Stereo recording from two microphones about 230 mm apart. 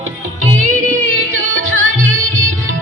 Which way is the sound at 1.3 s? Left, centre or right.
Right.